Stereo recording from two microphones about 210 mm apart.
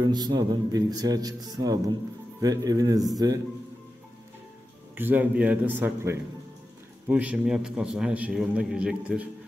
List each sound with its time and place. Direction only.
0.0 s a man's voice: 20° right (ahead or behind)
4.9 s a man's voice: 10° right (ahead or behind)